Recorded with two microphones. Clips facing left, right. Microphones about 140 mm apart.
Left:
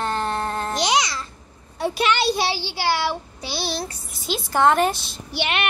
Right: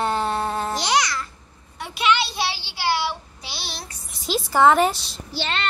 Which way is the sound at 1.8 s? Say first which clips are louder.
Left 2 dB; 40° left (ahead or behind).